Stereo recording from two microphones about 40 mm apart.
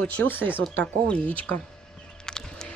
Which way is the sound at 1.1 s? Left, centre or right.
Left.